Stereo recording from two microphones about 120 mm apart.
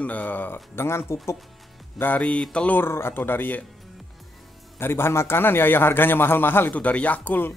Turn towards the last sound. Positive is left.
turn(degrees=15)  # may be behind; listen again after turning